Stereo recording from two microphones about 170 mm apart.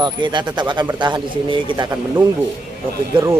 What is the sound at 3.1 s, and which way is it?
Speech, 30° right (ahead or behind).